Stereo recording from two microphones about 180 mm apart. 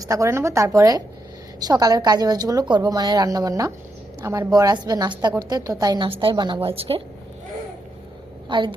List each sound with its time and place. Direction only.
0.0 s a woman's voice: 15° right (ahead or behind)
8.4 s a woman's voice: 25° right (ahead or behind)